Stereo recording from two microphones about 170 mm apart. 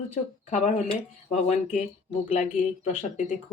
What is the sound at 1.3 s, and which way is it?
Speech, 40° left (ahead or behind).